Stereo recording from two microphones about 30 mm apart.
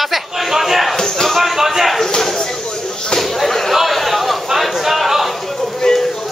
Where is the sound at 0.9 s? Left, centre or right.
Centre.